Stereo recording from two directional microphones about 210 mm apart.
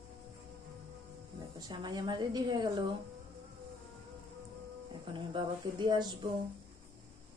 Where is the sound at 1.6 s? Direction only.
20° right (ahead or behind).